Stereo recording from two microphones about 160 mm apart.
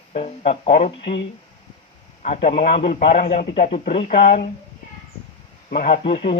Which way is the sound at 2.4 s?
40° left (ahead or behind).